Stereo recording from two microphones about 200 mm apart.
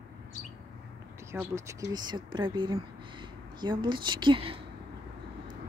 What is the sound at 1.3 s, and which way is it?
Speech, 15° right (ahead or behind).